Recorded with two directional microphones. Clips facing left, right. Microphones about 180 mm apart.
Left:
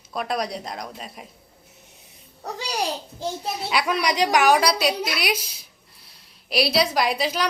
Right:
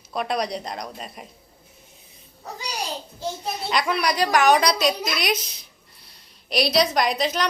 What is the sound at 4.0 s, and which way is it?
A woman's voice, 15° left (ahead or behind).